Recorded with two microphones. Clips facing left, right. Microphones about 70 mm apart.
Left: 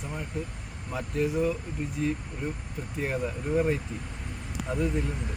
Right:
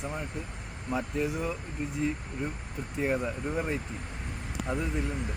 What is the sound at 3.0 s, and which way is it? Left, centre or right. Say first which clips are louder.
Speech: right 1 dB; centre.